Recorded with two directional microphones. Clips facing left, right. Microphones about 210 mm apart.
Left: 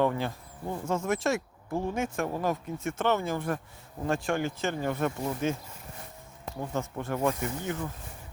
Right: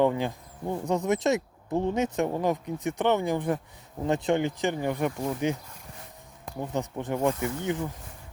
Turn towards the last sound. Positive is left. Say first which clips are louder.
# right 3 dB
turn(degrees=-20)  # may be behind; listen again after turning